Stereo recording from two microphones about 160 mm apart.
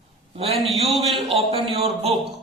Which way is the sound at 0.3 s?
40° right (ahead or behind).